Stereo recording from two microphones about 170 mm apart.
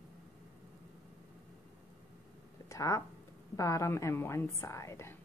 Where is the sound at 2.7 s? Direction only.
20° left (ahead or behind).